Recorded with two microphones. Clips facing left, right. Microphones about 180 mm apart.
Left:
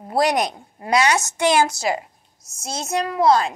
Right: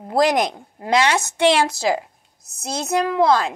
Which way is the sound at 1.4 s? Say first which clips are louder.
Right 3 dB; 60° right (ahead or behind).